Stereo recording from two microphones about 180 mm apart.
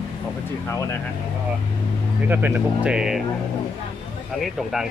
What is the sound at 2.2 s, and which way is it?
Speech, 10° right (ahead or behind).